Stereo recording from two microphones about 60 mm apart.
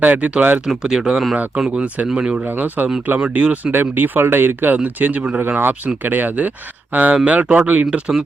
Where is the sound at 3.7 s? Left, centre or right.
Right.